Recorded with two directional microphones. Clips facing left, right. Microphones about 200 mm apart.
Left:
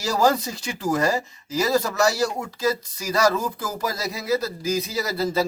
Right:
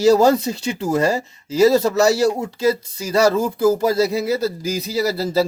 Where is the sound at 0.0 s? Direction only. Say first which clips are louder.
Right 8 dB; 25° right (ahead or behind).